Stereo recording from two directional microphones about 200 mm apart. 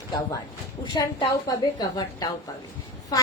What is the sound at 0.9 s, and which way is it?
A woman's voice, 20° left (ahead or behind).